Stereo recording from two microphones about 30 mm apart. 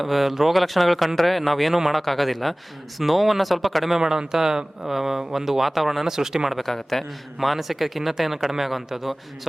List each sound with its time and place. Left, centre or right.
0.0 s speech: centre
3.8 s speech: centre
6.1 s speech: centre
6.5 s speech: centre
7.3 s speech: centre